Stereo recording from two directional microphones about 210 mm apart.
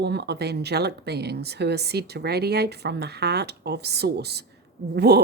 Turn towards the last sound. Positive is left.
turn(degrees=-50)  # may be behind; listen again after turning